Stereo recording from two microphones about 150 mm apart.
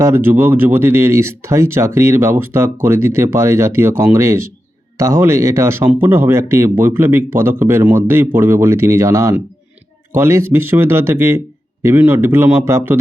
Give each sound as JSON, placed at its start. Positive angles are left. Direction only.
{"t": 0.0, "sound": "speech", "side_deg": -15}